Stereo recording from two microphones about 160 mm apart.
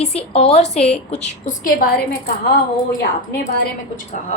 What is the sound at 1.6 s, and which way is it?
Speech, 65° left (ahead or behind).